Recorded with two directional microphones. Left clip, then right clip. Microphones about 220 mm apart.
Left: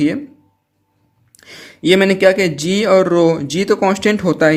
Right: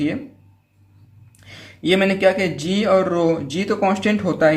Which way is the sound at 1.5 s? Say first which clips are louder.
Left 6 dB; 45° left (ahead or behind).